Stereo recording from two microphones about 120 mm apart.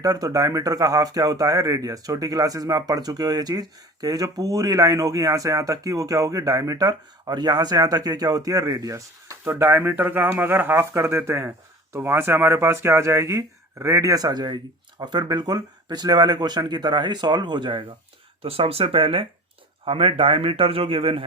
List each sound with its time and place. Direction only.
0.0 s speech: 30° right (ahead or behind)
18.4 s speech: 55° right (ahead or behind)